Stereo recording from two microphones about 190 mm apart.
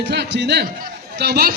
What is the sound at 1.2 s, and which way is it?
Speech, 55° right (ahead or behind).